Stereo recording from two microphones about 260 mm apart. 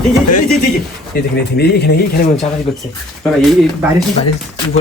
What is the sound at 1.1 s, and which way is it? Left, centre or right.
Speech, left.